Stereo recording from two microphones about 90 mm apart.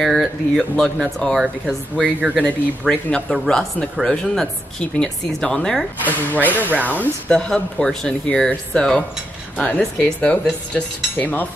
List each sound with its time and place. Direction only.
0.0 s speech: centre (ahead or behind)
2.1 s speech: 15° right (ahead or behind)
2.9 s speech: 15° left (ahead or behind)
3.3 s speech: 5° left (ahead or behind)
6.0 s speech: 20° left (ahead or behind)
6.7 s speech: 20° right (ahead or behind)
7.2 s speech: 10° left (ahead or behind)